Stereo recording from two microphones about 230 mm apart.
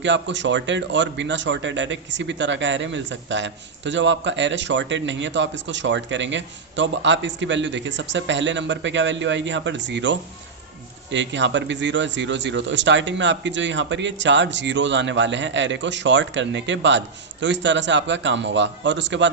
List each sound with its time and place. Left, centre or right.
0.0 s a man's voice: right